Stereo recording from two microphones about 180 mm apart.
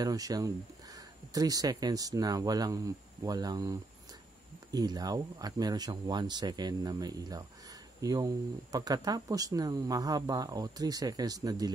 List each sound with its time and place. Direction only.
0.0 s speech: 20° right (ahead or behind)